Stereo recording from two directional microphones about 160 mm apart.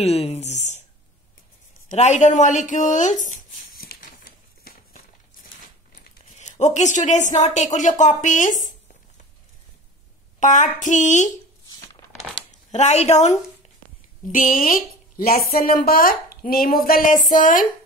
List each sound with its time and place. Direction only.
0.0 s a woman's voice: 40° left (ahead or behind)
1.9 s a sound: 45° left (ahead or behind)
6.3 s a woman's voice: 45° left (ahead or behind)
10.4 s a woman's voice: 50° left (ahead or behind)
11.7 s crumpling: 25° left (ahead or behind)
12.4 s a woman's voice: 45° left (ahead or behind)
14.3 s a woman's voice: 60° left (ahead or behind)